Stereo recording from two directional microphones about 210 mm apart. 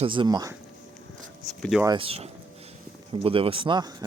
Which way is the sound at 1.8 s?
20° right (ahead or behind).